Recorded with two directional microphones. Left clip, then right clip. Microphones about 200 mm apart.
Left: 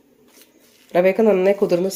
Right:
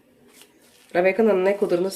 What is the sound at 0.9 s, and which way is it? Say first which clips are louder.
Speech: left 3 dB; 25° left (ahead or behind).